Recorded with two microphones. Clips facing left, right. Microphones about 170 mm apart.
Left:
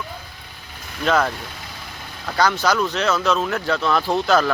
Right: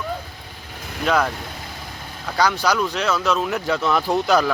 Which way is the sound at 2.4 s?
10° right (ahead or behind).